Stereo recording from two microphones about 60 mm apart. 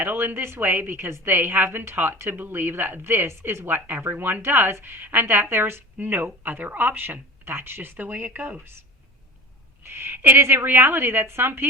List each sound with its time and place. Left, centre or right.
0.0 s a woman's voice: right
9.8 s a woman's voice: right